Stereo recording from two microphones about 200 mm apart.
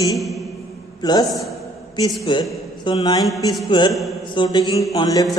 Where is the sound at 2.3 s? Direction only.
25° left (ahead or behind).